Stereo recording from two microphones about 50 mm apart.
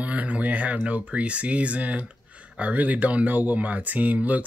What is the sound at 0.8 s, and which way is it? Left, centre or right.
Speech, right.